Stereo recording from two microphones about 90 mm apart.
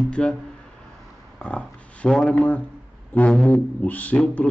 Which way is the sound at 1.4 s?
10° left (ahead or behind).